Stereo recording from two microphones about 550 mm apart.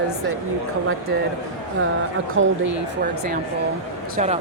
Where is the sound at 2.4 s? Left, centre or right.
Right.